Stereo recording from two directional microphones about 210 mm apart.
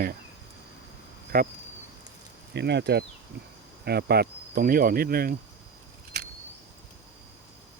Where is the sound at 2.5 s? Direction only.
55° right (ahead or behind).